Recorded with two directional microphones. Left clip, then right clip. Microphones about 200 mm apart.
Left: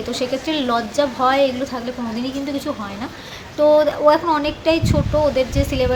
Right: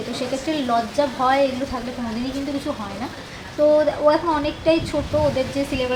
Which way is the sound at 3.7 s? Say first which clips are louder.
Left 3 dB; 15° left (ahead or behind).